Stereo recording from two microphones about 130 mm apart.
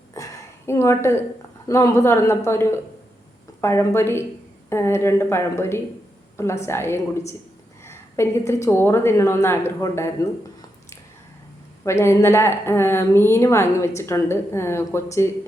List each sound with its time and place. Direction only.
0.1 s a sound: 25° left (ahead or behind)
1.6 s a woman's voice: 25° left (ahead or behind)
11.9 s a woman's voice: 20° left (ahead or behind)